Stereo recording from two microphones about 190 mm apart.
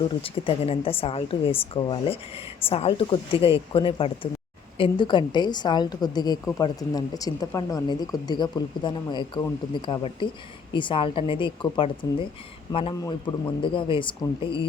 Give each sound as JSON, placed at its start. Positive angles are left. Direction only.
{"t": 0.2, "sound": "a woman's voice", "side_deg": 30}